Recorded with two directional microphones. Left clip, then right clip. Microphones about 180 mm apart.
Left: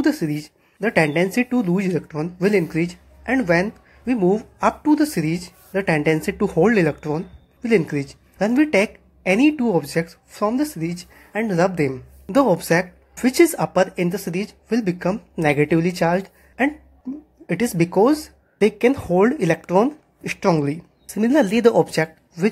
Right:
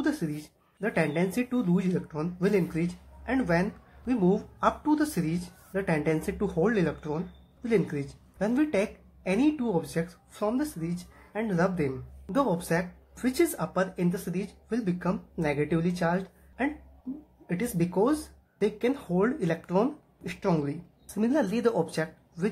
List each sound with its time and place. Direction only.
0.0 s speech: 20° left (ahead or behind)